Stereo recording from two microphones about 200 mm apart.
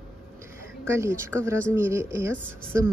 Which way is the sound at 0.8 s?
15° right (ahead or behind).